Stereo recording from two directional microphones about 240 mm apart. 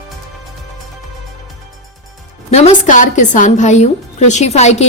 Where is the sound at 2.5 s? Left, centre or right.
Left.